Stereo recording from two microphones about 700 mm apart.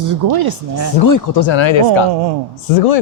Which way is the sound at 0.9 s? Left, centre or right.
Left.